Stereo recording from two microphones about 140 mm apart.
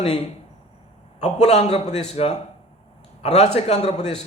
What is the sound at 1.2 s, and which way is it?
A man's voice, 50° left (ahead or behind).